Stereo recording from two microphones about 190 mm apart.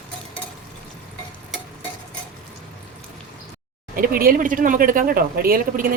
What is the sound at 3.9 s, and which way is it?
Speech, 50° right (ahead or behind).